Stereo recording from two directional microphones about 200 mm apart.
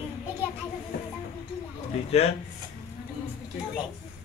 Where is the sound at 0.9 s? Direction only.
50° left (ahead or behind).